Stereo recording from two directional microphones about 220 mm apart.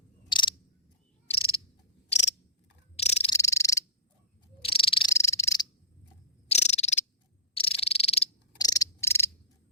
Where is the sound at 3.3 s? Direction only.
15° left (ahead or behind).